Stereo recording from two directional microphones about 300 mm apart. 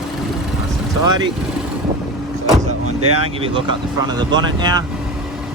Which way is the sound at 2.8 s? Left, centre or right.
Right.